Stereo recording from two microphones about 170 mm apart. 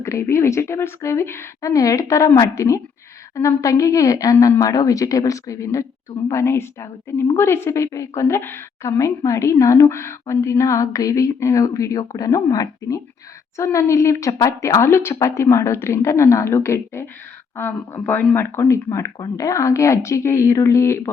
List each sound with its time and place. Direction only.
0.0 s a woman's voice: 15° left (ahead or behind)